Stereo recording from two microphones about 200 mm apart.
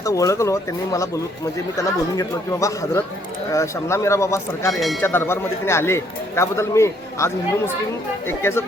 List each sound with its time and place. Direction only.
0.0 s a man's voice: 15° left (ahead or behind)
2.1 s a man's voice: 15° left (ahead or behind)
4.7 s speech: centre (ahead or behind)
5.0 s a man's voice: 10° left (ahead or behind)
8.3 s a man's voice: 10° left (ahead or behind)